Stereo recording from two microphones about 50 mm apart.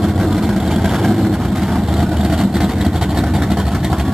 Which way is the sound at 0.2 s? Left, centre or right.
Centre.